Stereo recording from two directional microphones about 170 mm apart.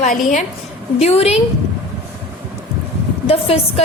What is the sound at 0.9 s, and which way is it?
Speech, 35° left (ahead or behind).